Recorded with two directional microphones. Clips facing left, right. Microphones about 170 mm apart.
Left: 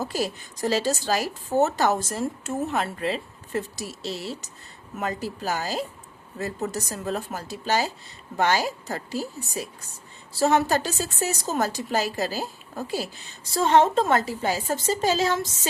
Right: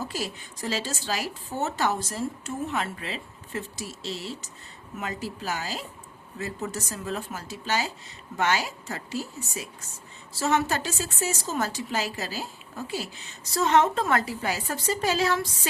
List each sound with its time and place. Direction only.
0.0 s speech: 40° left (ahead or behind)